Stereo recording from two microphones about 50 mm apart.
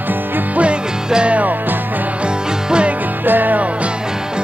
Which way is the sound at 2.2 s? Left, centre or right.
Centre.